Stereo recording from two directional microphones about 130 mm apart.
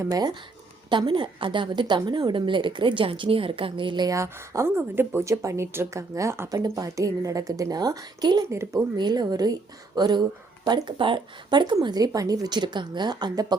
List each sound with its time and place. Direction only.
0.0 s a woman's voice: 30° right (ahead or behind)